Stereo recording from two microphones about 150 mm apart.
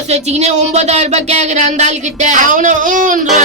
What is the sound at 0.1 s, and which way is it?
Speech, 45° right (ahead or behind).